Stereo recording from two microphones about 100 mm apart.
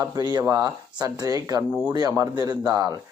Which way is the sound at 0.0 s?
40° right (ahead or behind).